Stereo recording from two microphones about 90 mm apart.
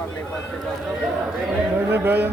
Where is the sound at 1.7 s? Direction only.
25° right (ahead or behind).